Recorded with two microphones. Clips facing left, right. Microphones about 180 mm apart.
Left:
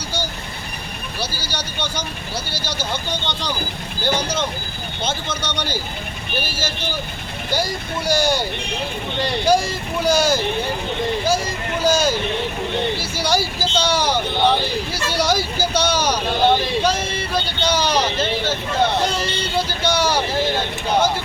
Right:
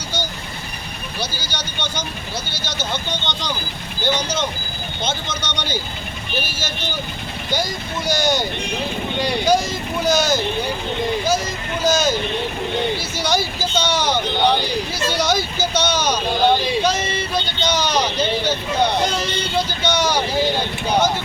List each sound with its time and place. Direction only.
1.2 s speech: 5° left (ahead or behind)
2.9 s speech: 10° left (ahead or behind)
7.5 s speech: 10° left (ahead or behind)
9.5 s speech: 10° left (ahead or behind)
11.8 s speech: 10° left (ahead or behind)